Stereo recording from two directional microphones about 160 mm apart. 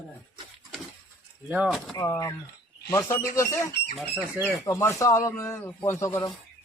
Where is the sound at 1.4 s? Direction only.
5° right (ahead or behind).